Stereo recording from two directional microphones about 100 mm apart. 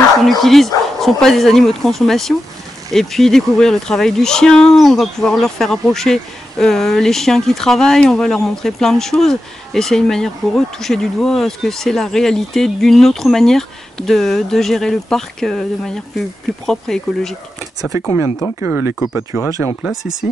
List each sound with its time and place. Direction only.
0.4 s speech: centre (ahead or behind)
17.9 s speech: 30° right (ahead or behind)
18.6 s speech: 20° right (ahead or behind)